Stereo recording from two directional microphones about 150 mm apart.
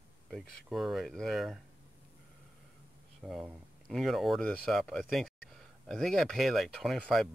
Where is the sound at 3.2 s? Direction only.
Centre (ahead or behind).